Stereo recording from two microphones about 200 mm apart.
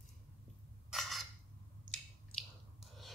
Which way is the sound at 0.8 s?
Centre (ahead or behind).